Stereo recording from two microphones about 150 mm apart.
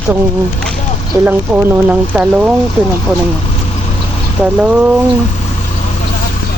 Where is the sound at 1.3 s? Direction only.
15° right (ahead or behind).